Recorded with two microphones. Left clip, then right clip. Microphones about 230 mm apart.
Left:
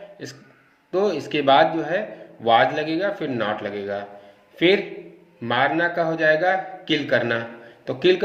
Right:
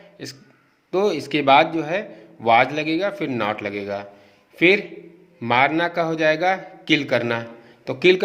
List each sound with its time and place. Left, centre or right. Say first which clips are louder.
0.9 s a man's voice: right 1 dB; right